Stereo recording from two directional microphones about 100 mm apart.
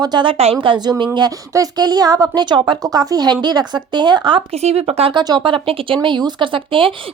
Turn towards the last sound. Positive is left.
turn(degrees=-60)  # may be behind; listen again after turning